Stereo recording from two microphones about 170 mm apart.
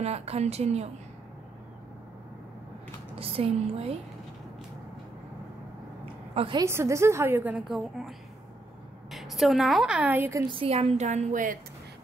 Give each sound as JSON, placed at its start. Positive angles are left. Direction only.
{"t": 0.0, "sound": "a woman's voice", "side_deg": -35}
{"t": 3.2, "sound": "a woman's voice", "side_deg": -35}
{"t": 6.3, "sound": "a woman's voice", "side_deg": -30}
{"t": 6.6, "sound": "a woman's voice", "side_deg": -15}
{"t": 9.1, "sound": "a woman's voice", "side_deg": 0}
{"t": 10.5, "sound": "a woman's voice", "side_deg": -35}